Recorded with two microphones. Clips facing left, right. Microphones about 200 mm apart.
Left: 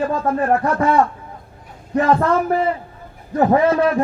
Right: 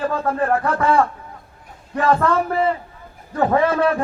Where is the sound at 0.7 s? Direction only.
30° right (ahead or behind).